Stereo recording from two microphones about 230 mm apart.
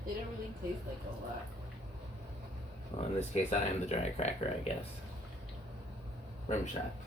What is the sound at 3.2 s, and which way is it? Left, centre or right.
Speech, left.